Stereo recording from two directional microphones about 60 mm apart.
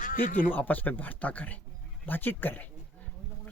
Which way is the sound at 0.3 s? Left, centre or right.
Left.